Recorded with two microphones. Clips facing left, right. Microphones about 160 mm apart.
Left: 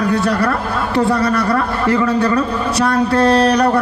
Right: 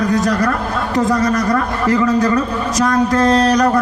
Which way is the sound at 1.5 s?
35° left (ahead or behind).